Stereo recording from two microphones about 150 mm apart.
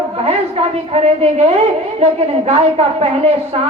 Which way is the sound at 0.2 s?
45° right (ahead or behind).